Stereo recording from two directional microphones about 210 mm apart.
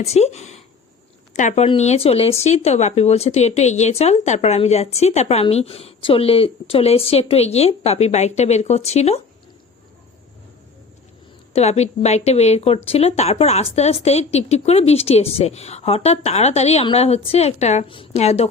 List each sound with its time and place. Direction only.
0.0 s speech: 30° left (ahead or behind)
11.5 s speech: 30° left (ahead or behind)